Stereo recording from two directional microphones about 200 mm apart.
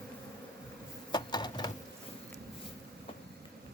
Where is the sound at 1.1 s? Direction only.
20° left (ahead or behind).